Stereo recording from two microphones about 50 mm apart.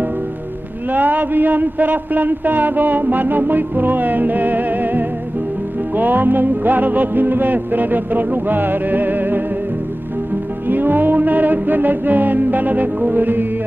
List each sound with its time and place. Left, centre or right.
0.9 s a man's voice: right
10.7 s a man's voice: right